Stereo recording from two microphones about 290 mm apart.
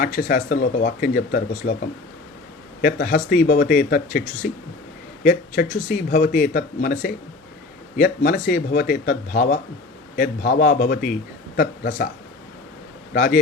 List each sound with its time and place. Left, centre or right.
0.0 s speech: left
2.8 s speech: left
13.1 s speech: left